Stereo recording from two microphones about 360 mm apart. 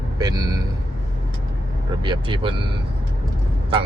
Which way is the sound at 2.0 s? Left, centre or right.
Centre.